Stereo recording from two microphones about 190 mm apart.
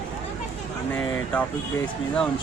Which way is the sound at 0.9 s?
5° left (ahead or behind).